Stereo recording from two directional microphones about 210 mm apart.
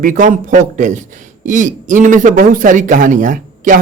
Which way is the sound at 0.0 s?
40° right (ahead or behind).